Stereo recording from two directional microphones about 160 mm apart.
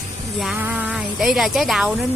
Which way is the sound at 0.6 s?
10° right (ahead or behind).